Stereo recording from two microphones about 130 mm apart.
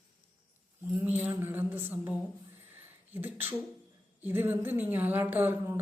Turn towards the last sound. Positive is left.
turn(degrees=-15)  # may be behind; listen again after turning